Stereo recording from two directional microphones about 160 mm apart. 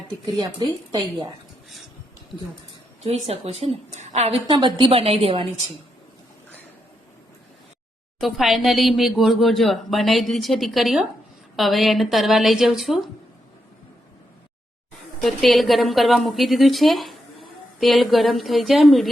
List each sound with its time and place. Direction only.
0.3 s speech: 25° right (ahead or behind)
3.0 s a woman's voice: 40° right (ahead or behind)
8.2 s speech: centre (ahead or behind)
15.2 s speech: centre (ahead or behind)